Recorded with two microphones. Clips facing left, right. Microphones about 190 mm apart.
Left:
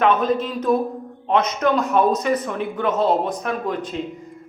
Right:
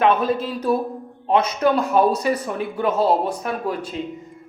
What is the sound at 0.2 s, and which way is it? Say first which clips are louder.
Speech: left 1 dB; 5° right (ahead or behind).